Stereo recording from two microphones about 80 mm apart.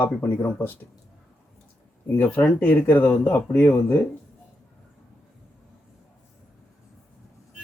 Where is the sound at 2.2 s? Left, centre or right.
Centre.